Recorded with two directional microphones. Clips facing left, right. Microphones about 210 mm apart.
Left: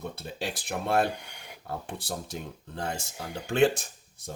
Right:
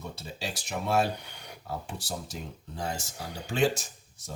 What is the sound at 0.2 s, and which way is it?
Speech, 55° left (ahead or behind).